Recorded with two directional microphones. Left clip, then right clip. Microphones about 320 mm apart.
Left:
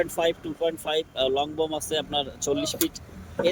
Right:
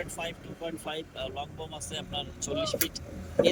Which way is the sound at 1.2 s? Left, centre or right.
Left.